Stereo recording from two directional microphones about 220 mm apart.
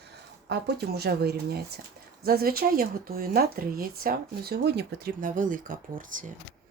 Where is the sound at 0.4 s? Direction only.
45° right (ahead or behind).